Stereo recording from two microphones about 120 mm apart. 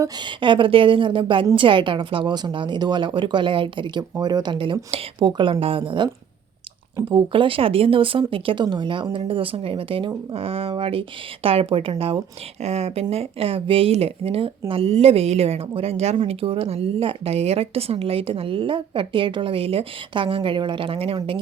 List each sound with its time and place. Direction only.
0.0 s a woman's voice: 40° right (ahead or behind)
12.6 s speech: 65° right (ahead or behind)